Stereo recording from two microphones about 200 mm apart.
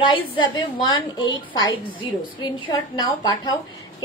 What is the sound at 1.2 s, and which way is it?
Speech, 75° left (ahead or behind).